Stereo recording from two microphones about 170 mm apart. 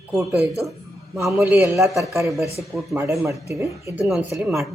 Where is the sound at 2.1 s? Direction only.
15° right (ahead or behind).